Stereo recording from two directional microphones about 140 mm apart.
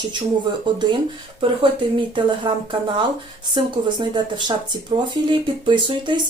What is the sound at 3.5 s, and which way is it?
Speech, 35° right (ahead or behind).